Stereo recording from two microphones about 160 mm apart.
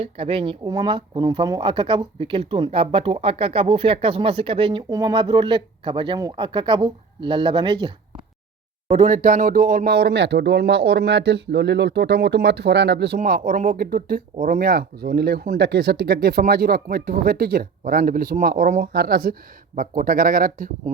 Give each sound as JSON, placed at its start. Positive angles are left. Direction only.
{"t": 0.0, "sound": "speech", "side_deg": -35}
{"t": 4.9, "sound": "speech", "side_deg": -25}
{"t": 8.9, "sound": "speech", "side_deg": -45}
{"t": 13.1, "sound": "speech", "side_deg": -65}